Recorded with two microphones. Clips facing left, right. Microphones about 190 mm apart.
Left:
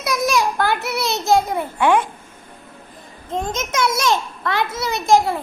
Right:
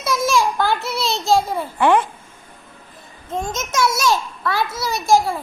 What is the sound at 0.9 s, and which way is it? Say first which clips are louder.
Speech: left 1 dB; 20° left (ahead or behind).